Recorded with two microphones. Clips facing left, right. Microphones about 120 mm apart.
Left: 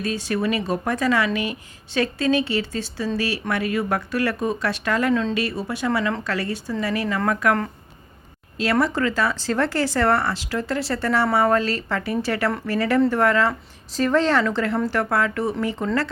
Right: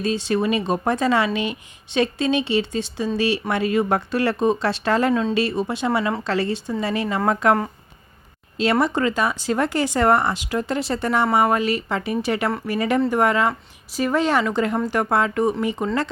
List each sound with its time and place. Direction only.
0.0 s a woman's voice: 25° right (ahead or behind)
8.5 s a woman's voice: 25° right (ahead or behind)